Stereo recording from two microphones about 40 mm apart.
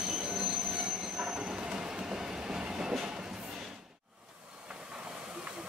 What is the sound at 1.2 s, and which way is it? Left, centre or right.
Train, right.